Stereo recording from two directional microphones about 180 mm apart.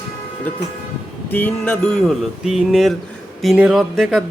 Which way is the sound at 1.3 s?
10° left (ahead or behind).